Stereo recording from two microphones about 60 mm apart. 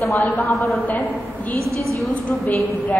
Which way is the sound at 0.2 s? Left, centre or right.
Left.